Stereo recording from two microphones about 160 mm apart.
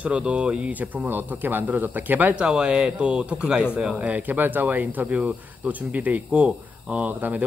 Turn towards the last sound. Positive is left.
turn(degrees=-10)  # may be behind; listen again after turning